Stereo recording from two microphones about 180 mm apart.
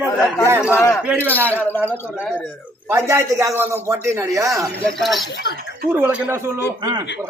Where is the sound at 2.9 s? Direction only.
15° right (ahead or behind).